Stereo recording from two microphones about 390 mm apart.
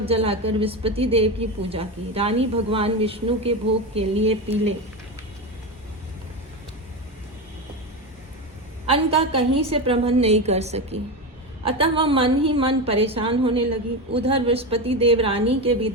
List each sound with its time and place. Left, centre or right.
0.0 s a woman's voice: centre
8.9 s a woman's voice: centre